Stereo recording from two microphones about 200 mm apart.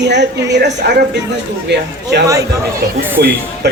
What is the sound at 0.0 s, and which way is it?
A woman's voice, 60° right (ahead or behind).